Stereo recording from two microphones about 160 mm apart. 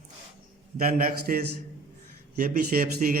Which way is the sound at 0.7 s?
60° right (ahead or behind).